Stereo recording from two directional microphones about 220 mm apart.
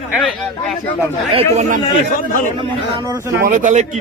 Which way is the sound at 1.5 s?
30° right (ahead or behind).